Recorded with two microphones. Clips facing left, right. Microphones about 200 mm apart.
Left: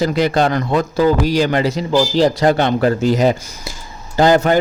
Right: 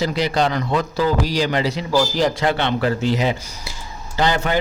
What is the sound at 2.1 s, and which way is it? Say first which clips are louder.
Speech: left 6 dB; 35° left (ahead or behind).